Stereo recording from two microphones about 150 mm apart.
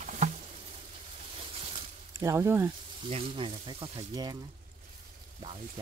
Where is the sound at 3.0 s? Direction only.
40° right (ahead or behind).